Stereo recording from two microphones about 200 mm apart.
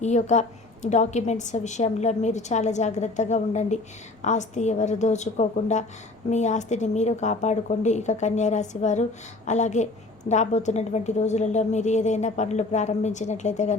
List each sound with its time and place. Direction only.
0.0 s a woman's voice: 35° left (ahead or behind)